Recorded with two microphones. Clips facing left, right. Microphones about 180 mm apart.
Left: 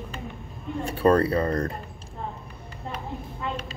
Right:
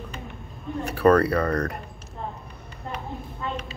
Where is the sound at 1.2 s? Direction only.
70° right (ahead or behind).